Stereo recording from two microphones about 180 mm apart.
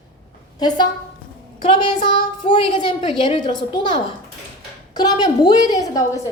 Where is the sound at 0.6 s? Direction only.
20° left (ahead or behind).